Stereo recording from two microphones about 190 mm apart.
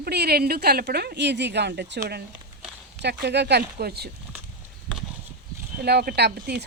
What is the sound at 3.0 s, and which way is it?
Speech, 60° right (ahead or behind).